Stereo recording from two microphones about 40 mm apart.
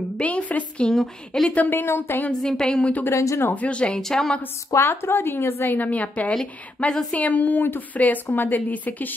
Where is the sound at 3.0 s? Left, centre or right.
Left.